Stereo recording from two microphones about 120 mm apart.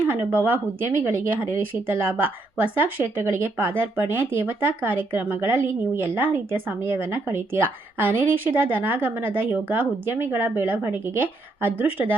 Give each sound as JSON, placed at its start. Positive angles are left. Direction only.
{"t": 0.1, "sound": "speech", "side_deg": -15}